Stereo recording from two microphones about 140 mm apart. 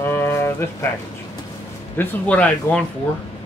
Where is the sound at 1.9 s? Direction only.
10° left (ahead or behind).